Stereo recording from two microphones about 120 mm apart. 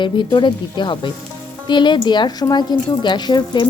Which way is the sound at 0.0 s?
40° left (ahead or behind).